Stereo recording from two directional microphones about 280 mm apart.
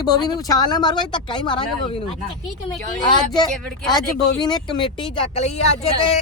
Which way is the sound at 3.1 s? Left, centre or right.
Centre.